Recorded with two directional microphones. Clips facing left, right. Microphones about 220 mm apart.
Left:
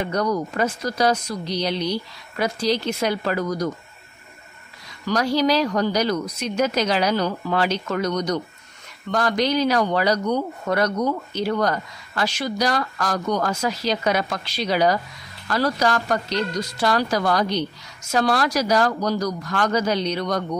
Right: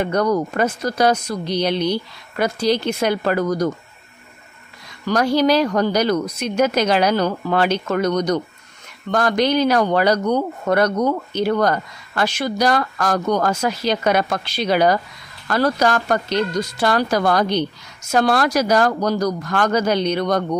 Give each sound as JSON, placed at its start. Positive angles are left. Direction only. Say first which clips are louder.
{"t": 0.1, "sound": "speech", "louder": "right 4 dB", "side_deg": -60}
{"t": 5.0, "sound": "speech", "louder": "right 3 dB", "side_deg": -55}